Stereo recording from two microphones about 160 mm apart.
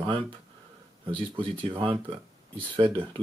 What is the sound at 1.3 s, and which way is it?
Speech, 35° right (ahead or behind).